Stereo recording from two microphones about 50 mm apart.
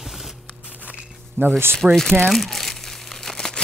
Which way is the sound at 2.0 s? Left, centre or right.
Centre.